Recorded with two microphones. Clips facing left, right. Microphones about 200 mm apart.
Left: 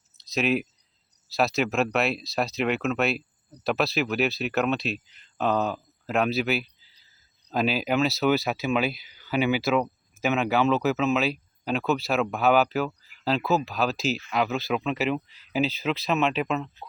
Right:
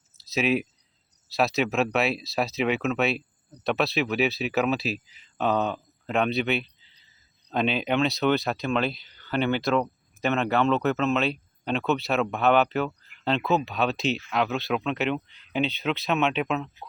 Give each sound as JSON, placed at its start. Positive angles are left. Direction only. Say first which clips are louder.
{"t": 0.2, "sound": "speech", "louder": "even", "side_deg": 0}